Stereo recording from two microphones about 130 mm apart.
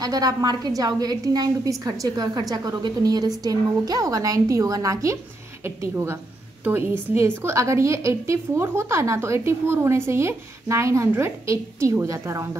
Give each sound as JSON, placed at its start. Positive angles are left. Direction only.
{"t": 0.0, "sound": "a woman's voice", "side_deg": -30}